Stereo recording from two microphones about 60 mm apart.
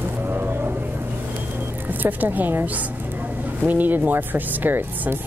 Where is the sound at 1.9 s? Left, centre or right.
Right.